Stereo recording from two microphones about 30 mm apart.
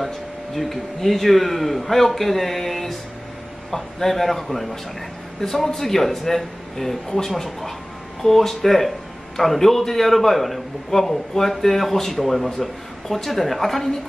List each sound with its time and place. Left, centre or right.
0.6 s speech: centre